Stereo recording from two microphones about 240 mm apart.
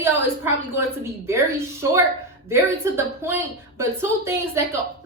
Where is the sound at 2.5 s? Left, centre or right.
Centre.